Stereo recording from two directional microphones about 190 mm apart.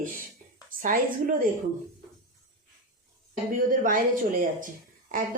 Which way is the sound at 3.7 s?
45° right (ahead or behind).